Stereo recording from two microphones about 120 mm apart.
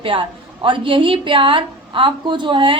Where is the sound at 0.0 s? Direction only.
45° right (ahead or behind).